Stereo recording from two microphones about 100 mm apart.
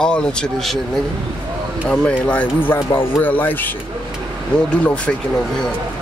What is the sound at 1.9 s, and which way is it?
Speech, 10° left (ahead or behind).